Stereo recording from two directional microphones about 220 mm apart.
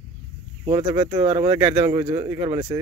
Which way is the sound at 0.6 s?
20° right (ahead or behind).